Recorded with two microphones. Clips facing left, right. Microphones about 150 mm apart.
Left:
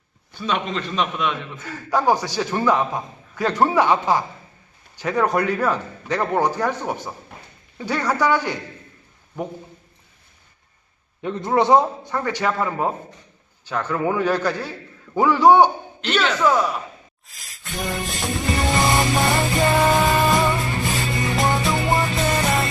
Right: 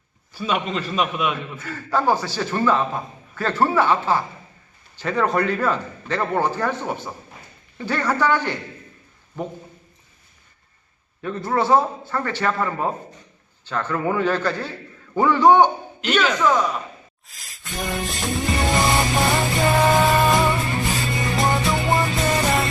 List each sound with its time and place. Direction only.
0.3 s a man's voice: 5° right (ahead or behind)
1.6 s a man's voice: 15° left (ahead or behind)
11.2 s a man's voice: 20° left (ahead or behind)
17.2 s music: centre (ahead or behind)